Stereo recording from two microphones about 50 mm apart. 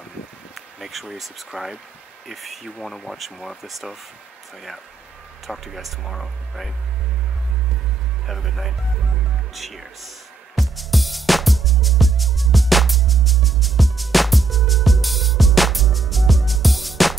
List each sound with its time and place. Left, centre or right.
0.7 s speech: centre
5.5 s speech: centre
8.3 s speech: centre
9.5 s music: centre